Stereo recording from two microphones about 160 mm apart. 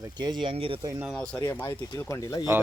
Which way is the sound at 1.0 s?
5° left (ahead or behind).